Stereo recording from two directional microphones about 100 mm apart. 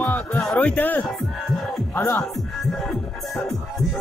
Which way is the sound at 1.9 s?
20° left (ahead or behind).